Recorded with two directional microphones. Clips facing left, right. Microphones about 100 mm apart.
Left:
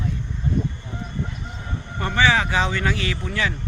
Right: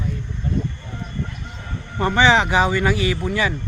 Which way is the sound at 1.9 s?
20° right (ahead or behind).